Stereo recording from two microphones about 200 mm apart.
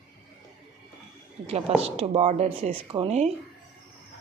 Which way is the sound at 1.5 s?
30° right (ahead or behind).